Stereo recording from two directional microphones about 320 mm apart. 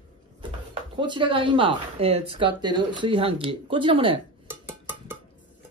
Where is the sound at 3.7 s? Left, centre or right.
Centre.